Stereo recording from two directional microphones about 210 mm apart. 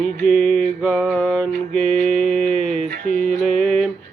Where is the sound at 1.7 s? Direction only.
30° left (ahead or behind).